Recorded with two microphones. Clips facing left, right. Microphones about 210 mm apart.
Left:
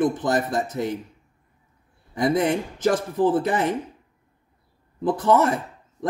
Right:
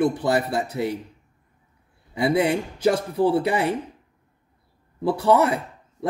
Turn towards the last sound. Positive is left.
turn(degrees=-15)  # may be behind; listen again after turning